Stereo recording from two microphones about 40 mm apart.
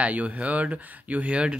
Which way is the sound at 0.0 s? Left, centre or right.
Right.